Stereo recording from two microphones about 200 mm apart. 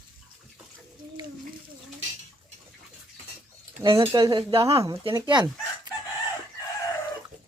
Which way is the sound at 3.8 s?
25° right (ahead or behind).